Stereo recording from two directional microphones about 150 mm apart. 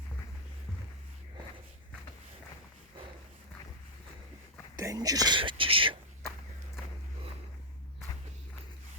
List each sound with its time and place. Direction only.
4.8 s speech: 25° right (ahead or behind)